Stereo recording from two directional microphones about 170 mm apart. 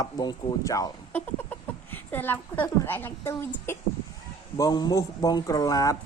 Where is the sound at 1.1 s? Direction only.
10° left (ahead or behind).